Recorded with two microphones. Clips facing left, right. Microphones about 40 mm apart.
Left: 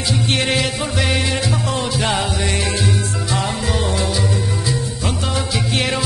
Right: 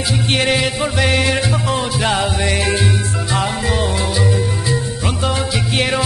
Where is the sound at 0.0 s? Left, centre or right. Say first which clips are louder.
Right 2 dB; centre.